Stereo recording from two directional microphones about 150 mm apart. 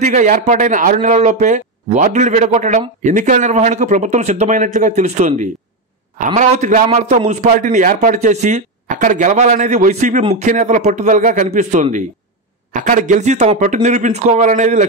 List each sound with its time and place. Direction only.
0.0 s a man's voice: 55° right (ahead or behind)
0.9 s a man's voice: 50° right (ahead or behind)